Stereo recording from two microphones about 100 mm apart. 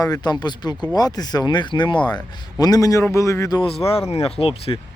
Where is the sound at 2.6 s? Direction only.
40° left (ahead or behind).